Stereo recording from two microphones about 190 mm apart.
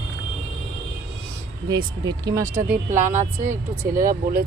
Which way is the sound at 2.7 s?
40° right (ahead or behind).